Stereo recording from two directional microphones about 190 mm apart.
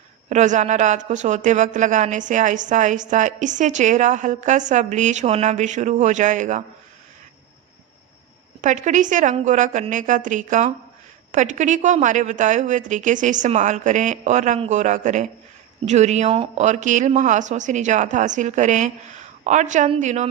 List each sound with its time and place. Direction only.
0.3 s speech: 40° right (ahead or behind)
8.6 s speech: 40° right (ahead or behind)